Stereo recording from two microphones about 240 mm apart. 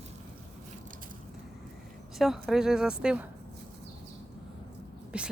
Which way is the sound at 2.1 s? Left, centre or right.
Centre.